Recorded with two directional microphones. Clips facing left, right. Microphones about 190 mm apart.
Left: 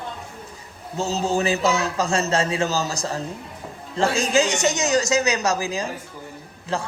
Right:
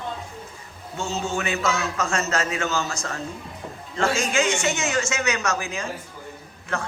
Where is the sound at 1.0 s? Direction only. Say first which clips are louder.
Left 5 dB; 35° left (ahead or behind).